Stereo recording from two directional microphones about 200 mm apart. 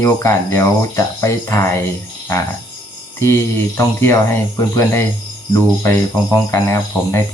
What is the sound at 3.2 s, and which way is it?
Speech, 15° left (ahead or behind).